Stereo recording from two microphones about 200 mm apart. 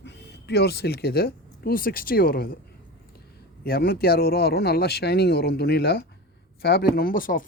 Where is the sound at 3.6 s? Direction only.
50° left (ahead or behind).